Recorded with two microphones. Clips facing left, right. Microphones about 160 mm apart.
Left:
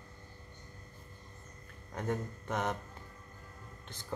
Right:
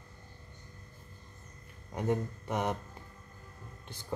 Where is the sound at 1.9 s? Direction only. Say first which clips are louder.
Right 4 dB; 10° right (ahead or behind).